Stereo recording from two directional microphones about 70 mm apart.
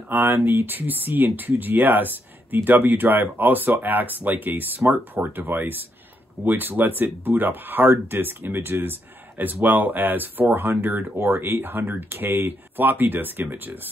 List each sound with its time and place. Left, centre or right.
0.1 s speech: right